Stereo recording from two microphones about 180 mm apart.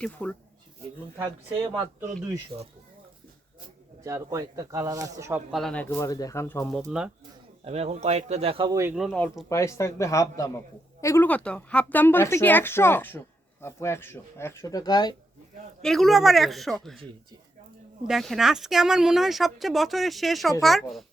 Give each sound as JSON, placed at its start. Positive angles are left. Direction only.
{"t": 0.0, "sound": "speech", "side_deg": 5}
{"t": 1.1, "sound": "speech", "side_deg": -15}
{"t": 2.5, "sound": "speech", "side_deg": -35}
{"t": 4.0, "sound": "speech", "side_deg": -15}
{"t": 5.5, "sound": "speech", "side_deg": 0}
{"t": 6.9, "sound": "speech", "side_deg": -5}
{"t": 7.6, "sound": "speech", "side_deg": -35}
{"t": 8.7, "sound": "speech", "side_deg": -15}
{"t": 9.5, "sound": "speech", "side_deg": 15}
{"t": 15.8, "sound": "speech", "side_deg": 0}
{"t": 18.1, "sound": "speech", "side_deg": 0}